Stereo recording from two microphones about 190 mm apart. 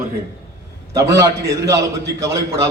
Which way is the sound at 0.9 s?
15° right (ahead or behind).